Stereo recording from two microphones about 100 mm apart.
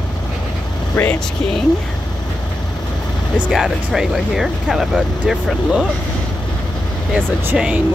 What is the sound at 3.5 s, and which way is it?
Speech, 5° right (ahead or behind).